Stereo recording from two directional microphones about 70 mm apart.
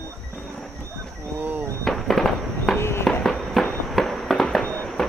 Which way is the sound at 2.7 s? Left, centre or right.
Left.